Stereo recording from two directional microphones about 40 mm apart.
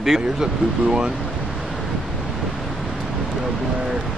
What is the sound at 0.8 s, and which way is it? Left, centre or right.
Speech, right.